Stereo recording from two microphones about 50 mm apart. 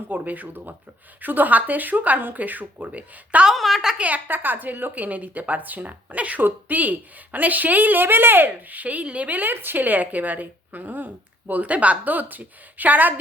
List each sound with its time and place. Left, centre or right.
0.1 s speech: right
3.5 s a woman's voice: centre
3.9 s a woman's voice: right
4.3 s speech: right
8.8 s speech: right